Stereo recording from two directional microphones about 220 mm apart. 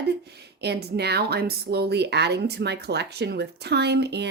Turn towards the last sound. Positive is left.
turn(degrees=-50)  # may be behind; listen again after turning